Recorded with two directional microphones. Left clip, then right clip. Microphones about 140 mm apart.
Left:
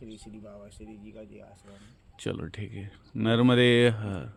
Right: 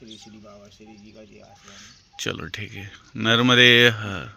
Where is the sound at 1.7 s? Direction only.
10° left (ahead or behind).